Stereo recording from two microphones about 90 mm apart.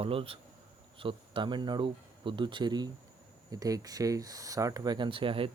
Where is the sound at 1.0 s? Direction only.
70° right (ahead or behind); by 2.8 s 55° right (ahead or behind).